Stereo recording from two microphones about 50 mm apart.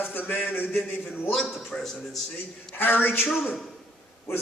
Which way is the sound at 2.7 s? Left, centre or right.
Left.